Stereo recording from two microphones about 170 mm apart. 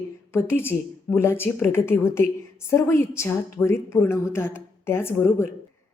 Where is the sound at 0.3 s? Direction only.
15° left (ahead or behind).